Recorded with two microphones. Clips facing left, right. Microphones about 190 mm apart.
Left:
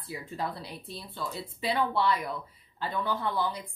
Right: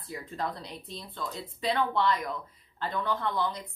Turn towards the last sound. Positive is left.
turn(degrees=10)  # may be behind; listen again after turning